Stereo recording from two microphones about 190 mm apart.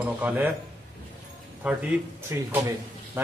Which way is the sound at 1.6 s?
5° right (ahead or behind).